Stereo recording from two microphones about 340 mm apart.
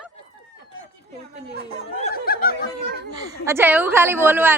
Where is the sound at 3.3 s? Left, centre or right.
Centre.